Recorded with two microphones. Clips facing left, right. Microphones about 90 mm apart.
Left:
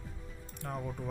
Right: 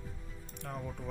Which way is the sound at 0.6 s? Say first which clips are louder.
Left 3 dB; 5° left (ahead or behind).